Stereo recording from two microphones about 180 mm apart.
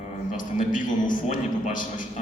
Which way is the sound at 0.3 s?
45° left (ahead or behind).